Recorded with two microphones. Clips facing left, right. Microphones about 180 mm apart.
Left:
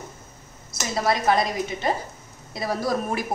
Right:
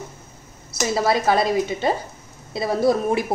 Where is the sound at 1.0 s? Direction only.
30° right (ahead or behind).